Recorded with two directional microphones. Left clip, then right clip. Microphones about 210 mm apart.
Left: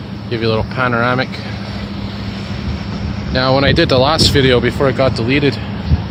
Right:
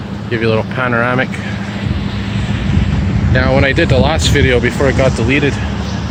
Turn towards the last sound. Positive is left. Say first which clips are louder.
# right 1 dB
turn(degrees=15)  # may be behind; listen again after turning